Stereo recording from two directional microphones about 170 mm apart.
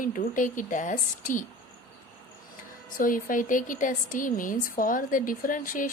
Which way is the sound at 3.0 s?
55° left (ahead or behind).